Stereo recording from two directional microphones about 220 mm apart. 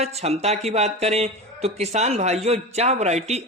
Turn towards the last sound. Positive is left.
turn(degrees=-30)  # may be behind; listen again after turning